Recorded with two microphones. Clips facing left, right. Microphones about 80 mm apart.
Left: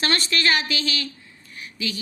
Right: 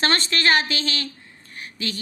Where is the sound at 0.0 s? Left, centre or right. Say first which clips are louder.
Right 1 dB; right.